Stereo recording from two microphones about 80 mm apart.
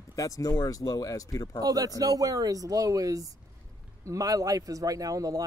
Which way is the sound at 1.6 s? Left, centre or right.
Right.